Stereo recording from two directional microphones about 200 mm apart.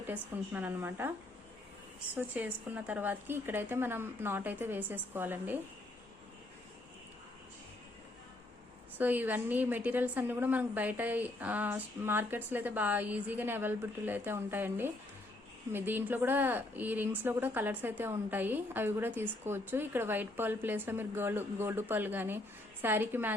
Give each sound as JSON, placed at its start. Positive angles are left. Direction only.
{"t": 0.1, "sound": "speech", "side_deg": -10}
{"t": 2.1, "sound": "speech", "side_deg": -10}
{"t": 9.0, "sound": "speech", "side_deg": -10}